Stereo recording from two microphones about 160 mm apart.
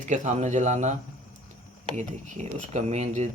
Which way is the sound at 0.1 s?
50° right (ahead or behind).